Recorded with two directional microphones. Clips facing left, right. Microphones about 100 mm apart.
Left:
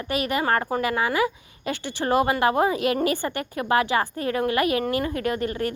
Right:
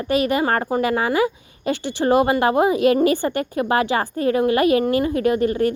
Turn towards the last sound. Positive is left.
turn(degrees=-25)  # may be behind; listen again after turning